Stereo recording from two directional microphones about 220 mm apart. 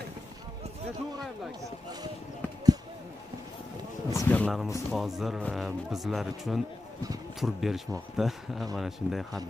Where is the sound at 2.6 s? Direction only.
20° right (ahead or behind).